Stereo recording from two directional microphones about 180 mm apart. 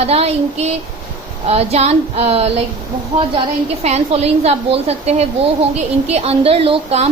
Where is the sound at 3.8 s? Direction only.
35° right (ahead or behind).